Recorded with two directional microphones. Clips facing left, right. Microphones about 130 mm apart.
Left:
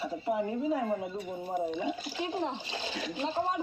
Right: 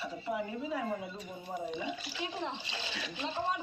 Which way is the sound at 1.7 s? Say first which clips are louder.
Left 5 dB; 45° left (ahead or behind).